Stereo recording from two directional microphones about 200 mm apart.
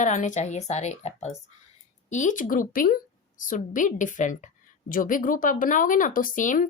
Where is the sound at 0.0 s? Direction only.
40° left (ahead or behind).